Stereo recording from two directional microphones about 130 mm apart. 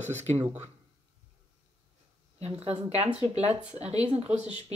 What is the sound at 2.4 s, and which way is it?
Speech, 55° right (ahead or behind).